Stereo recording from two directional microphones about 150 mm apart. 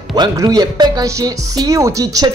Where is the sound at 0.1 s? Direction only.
25° right (ahead or behind).